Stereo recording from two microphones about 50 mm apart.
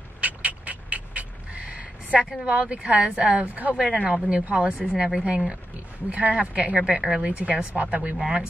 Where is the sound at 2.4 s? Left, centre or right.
Right.